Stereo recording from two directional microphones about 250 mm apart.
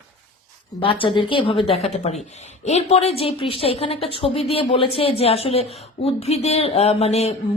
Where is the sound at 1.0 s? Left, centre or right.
Centre.